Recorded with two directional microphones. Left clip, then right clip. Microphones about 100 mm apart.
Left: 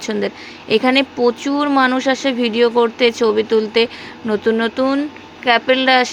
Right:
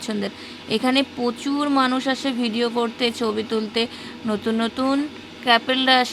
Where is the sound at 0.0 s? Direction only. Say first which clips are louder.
Left 7 dB; 25° right (ahead or behind).